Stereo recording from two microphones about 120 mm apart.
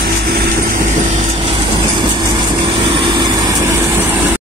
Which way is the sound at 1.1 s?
50° right (ahead or behind).